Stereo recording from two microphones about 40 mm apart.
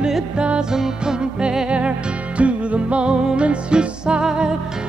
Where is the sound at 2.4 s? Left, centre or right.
Right.